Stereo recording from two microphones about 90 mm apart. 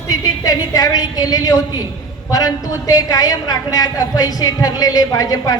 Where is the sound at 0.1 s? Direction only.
45° left (ahead or behind).